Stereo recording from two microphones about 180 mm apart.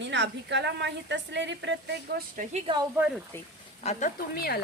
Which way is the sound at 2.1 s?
45° right (ahead or behind).